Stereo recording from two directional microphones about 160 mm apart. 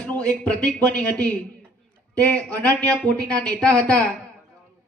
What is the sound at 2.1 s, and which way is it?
Speech, 10° left (ahead or behind).